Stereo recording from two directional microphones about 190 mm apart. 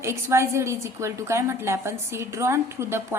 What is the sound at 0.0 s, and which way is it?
A woman's voice, 15° right (ahead or behind).